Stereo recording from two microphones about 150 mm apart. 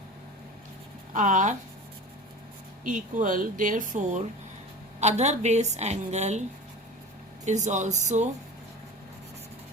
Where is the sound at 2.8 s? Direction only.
60° right (ahead or behind).